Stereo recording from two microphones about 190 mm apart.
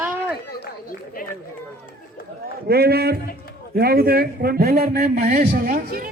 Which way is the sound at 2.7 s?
55° right (ahead or behind).